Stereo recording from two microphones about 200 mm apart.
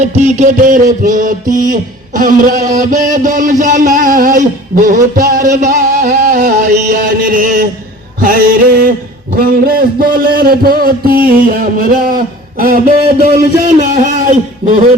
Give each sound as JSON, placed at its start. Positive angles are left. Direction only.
{"t": 0.0, "sound": "music", "side_deg": -35}
{"t": 8.2, "sound": "a man's voice", "side_deg": -45}
{"t": 13.9, "sound": "music", "side_deg": -40}